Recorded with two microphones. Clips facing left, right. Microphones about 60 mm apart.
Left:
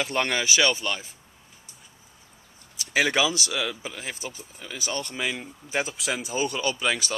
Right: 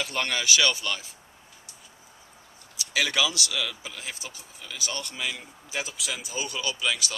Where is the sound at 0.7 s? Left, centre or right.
Centre.